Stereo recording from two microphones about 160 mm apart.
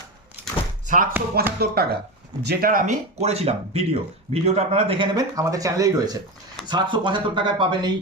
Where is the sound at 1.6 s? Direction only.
75° right (ahead or behind); by 5.2 s 35° right (ahead or behind).